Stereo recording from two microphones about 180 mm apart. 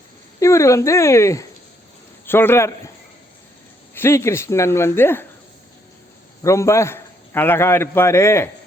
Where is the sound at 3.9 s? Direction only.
15° left (ahead or behind).